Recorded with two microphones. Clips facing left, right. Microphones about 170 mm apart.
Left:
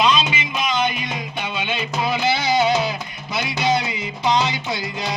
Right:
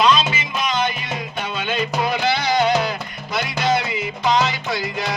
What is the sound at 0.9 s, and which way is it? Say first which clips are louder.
Music: even; 45° right (ahead or behind).